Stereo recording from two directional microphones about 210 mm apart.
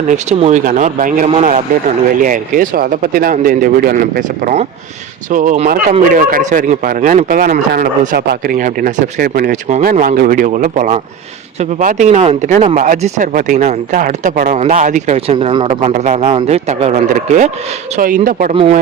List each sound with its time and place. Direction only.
0.1 s speech: 30° right (ahead or behind)
17.9 s speech: 40° right (ahead or behind)
18.5 s speech: 25° right (ahead or behind)